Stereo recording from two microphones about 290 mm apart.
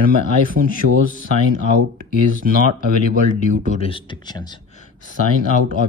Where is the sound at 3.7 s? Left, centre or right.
Centre.